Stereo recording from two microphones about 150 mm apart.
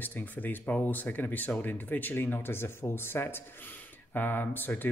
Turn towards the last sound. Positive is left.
turn(degrees=10)  # may be behind; listen again after turning